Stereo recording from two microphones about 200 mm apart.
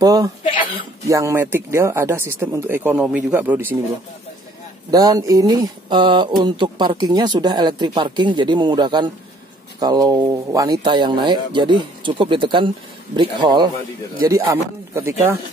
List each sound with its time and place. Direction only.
0.0 s speech: 15° right (ahead or behind)
0.4 s speech: 25° left (ahead or behind)
1.0 s speech: 15° right (ahead or behind)
4.9 s speech: 20° right (ahead or behind)